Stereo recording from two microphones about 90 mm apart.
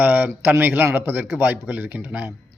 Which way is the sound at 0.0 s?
20° right (ahead or behind).